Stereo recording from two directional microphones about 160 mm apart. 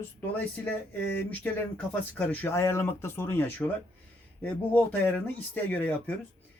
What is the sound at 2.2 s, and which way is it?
Speech, 10° left (ahead or behind).